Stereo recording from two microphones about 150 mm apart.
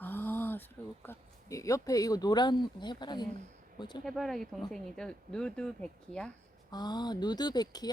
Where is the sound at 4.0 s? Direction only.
Centre (ahead or behind).